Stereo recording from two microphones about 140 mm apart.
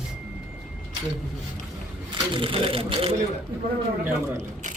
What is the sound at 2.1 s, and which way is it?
Speech, 40° right (ahead or behind).